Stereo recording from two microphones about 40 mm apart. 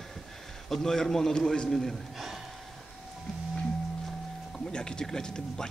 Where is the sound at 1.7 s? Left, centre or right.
Centre.